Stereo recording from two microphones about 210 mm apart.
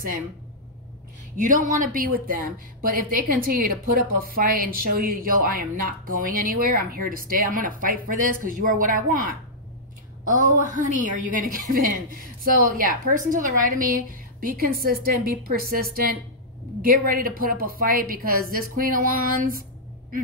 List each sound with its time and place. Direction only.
1.3 s a woman's voice: 40° right (ahead or behind)